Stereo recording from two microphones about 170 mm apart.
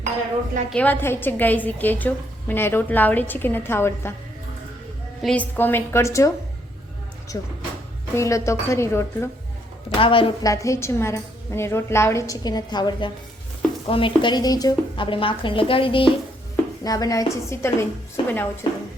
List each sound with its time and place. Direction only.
0.7 s a woman's voice: 10° left (ahead or behind)
5.2 s a woman's voice: 10° left (ahead or behind)
7.3 s a woman's voice: 20° left (ahead or behind)
10.0 s a woman's voice: 30° left (ahead or behind)
10.5 s a woman's voice: 20° left (ahead or behind)